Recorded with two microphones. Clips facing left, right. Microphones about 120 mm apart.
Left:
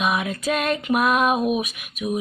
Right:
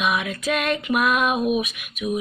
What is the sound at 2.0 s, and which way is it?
Speech, 25° left (ahead or behind).